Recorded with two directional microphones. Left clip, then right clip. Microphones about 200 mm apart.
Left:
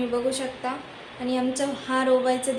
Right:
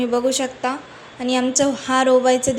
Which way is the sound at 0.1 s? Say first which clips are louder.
Right 6 dB; 35° right (ahead or behind).